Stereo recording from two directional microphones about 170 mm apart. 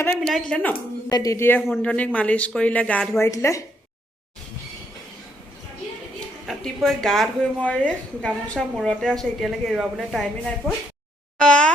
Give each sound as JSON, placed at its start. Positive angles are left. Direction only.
{"t": 0.2, "sound": "a woman's voice", "side_deg": 0}
{"t": 1.1, "sound": "speech", "side_deg": 20}
{"t": 3.2, "sound": "speech", "side_deg": 15}
{"t": 6.4, "sound": "a woman's voice", "side_deg": 0}
{"t": 11.3, "sound": "a sound", "side_deg": 5}